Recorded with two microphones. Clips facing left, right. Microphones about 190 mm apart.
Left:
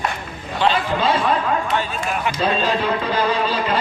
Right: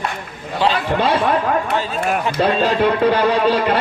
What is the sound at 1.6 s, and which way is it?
Speech, 60° right (ahead or behind).